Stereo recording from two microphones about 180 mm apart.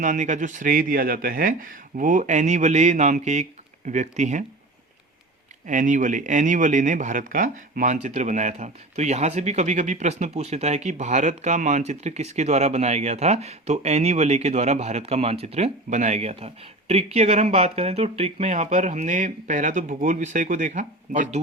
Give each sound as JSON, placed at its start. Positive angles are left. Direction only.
{"t": 0.0, "sound": "speech", "side_deg": -45}
{"t": 5.6, "sound": "speech", "side_deg": -45}